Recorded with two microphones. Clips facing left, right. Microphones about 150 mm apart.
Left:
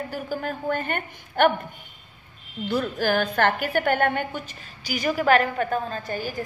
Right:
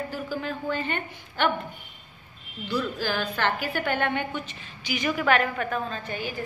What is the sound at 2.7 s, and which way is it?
A woman's voice, 50° left (ahead or behind).